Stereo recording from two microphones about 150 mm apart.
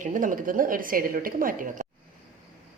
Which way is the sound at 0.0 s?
60° right (ahead or behind).